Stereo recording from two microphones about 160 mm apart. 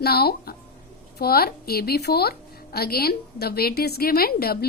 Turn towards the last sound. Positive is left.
turn(degrees=70)  # may be behind; listen again after turning